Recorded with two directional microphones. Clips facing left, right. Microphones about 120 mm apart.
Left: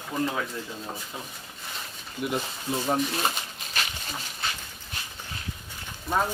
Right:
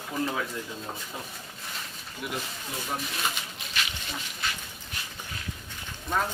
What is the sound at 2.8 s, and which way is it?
Speech, 40° left (ahead or behind).